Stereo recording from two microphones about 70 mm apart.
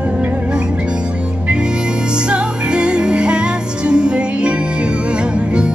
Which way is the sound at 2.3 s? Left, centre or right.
Centre.